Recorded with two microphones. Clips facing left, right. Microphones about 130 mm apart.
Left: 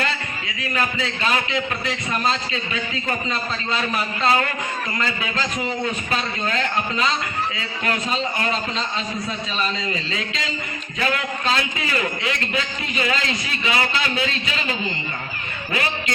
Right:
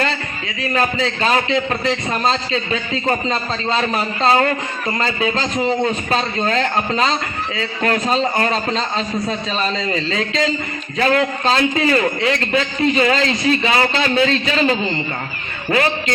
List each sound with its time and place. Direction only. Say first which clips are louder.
0.0 s a man's voice: right 4 dB; 35° right (ahead or behind)